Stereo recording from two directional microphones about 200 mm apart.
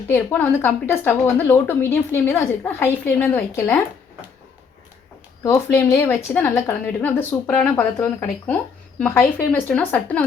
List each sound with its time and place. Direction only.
0.1 s speech: 10° left (ahead or behind)
5.4 s speech: 15° left (ahead or behind)
9.0 s speech: 5° left (ahead or behind)